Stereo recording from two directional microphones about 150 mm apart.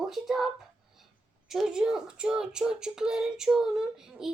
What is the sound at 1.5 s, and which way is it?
A woman's voice, 5° right (ahead or behind).